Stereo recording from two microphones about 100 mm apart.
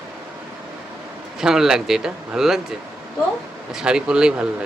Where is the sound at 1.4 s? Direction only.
5° right (ahead or behind).